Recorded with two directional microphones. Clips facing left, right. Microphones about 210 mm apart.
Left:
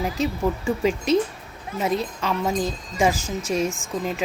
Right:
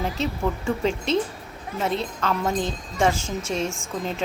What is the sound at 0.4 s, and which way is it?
Speech, 5° left (ahead or behind).